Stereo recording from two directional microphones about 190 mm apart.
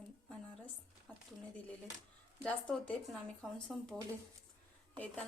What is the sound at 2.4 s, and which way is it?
Speech, 5° left (ahead or behind).